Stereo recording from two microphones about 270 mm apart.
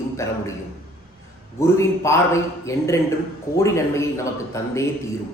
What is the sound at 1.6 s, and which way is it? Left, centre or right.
Speech, centre.